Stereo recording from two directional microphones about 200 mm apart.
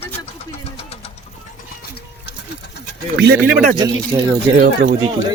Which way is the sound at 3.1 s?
60° right (ahead or behind).